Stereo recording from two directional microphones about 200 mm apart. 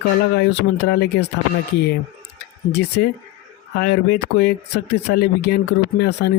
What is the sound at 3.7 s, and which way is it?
Speech, 55° left (ahead or behind).